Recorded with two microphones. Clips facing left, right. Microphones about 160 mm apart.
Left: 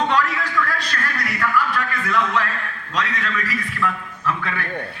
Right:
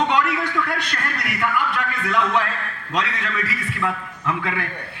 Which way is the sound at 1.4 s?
20° right (ahead or behind).